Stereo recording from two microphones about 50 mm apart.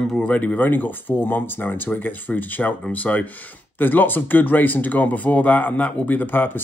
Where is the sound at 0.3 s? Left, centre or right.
Left.